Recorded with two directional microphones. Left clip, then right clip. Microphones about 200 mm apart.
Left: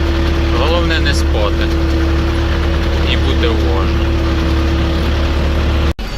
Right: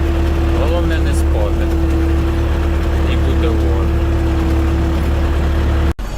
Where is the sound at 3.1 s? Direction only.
Centre (ahead or behind).